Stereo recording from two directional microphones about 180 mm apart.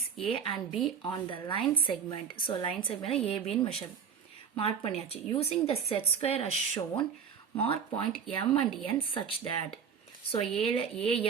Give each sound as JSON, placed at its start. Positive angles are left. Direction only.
{"t": 0.3, "sound": "a woman's voice", "side_deg": 30}